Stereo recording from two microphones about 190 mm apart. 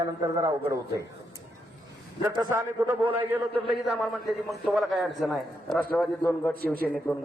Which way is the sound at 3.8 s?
Centre (ahead or behind).